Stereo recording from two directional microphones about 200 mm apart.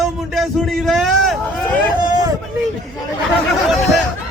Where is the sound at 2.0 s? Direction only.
20° right (ahead or behind).